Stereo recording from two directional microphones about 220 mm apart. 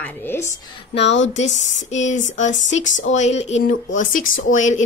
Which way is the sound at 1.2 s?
30° left (ahead or behind).